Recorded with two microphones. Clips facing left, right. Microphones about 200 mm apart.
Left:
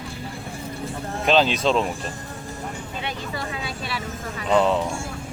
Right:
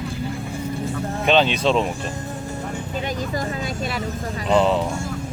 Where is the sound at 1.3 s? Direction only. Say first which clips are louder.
Right 1 dB; centre (ahead or behind).